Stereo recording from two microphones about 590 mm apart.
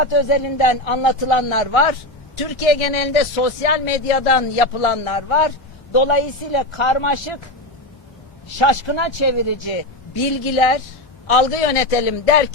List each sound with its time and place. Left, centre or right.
0.0 s a man's voice: left
8.5 s speech: left
10.4 s a man's voice: left